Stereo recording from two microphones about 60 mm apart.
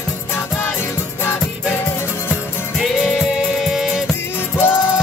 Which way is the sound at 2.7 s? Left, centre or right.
Centre.